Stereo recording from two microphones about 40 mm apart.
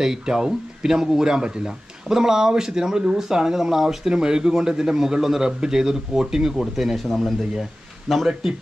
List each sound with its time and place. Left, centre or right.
0.0 s speech: centre
8.3 s speech: centre